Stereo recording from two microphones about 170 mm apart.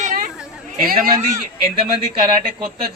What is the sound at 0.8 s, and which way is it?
Speech, 55° right (ahead or behind).